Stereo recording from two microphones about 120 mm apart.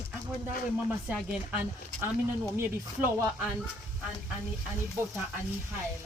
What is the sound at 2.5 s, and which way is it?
Speech, 20° right (ahead or behind).